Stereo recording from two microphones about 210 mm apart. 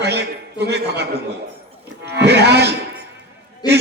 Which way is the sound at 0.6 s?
50° right (ahead or behind).